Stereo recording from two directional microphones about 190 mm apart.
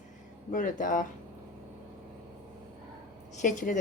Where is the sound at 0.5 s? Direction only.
45° left (ahead or behind).